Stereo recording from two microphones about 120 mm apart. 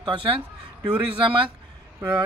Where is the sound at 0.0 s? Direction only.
45° right (ahead or behind).